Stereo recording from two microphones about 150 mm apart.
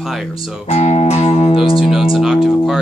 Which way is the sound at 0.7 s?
45° left (ahead or behind).